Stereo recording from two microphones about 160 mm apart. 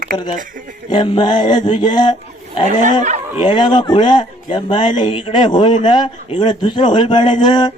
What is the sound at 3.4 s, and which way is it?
A man's voice, 30° left (ahead or behind).